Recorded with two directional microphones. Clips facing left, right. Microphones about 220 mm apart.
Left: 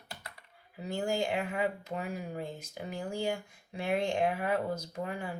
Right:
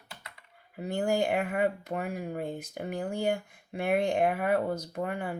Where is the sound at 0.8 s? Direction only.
55° right (ahead or behind).